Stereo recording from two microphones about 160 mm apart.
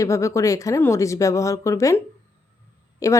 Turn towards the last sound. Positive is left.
turn(degrees=20)  # may be behind; listen again after turning